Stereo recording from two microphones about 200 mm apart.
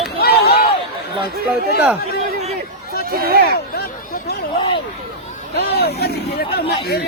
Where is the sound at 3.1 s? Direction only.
50° right (ahead or behind).